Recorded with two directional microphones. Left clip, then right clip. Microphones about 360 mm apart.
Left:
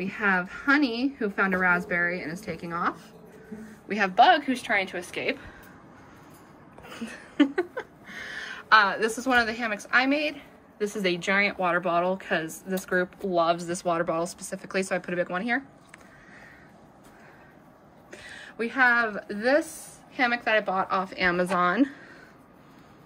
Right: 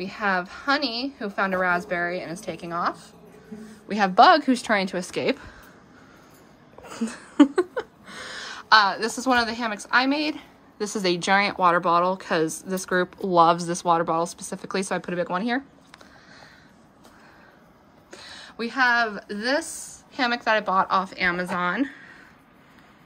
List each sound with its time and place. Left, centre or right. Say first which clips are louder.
0.2 s speech: right 1 dB; centre
6.9 s a sound: right 6 dB; centre
11.0 s speech: right 4 dB; centre
18.1 s a woman's voice: even; centre